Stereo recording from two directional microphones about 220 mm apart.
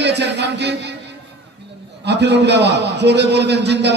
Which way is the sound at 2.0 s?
50° right (ahead or behind).